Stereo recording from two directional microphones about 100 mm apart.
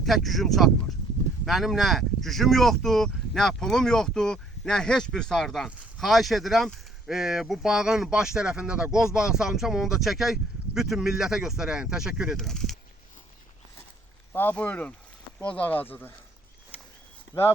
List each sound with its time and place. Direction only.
0.0 s speech: centre (ahead or behind)
12.4 s speech: 5° left (ahead or behind)
14.3 s speech: 15° left (ahead or behind)